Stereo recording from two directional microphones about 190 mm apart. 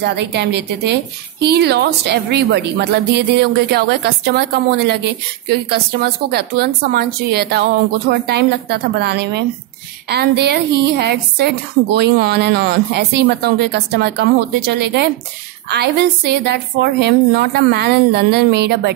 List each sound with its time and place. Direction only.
0.0 s a woman's voice: 60° right (ahead or behind)
15.7 s a woman's voice: 60° right (ahead or behind)